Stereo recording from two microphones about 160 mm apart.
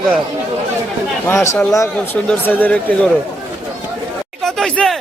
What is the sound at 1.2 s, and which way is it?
Speech, 15° left (ahead or behind).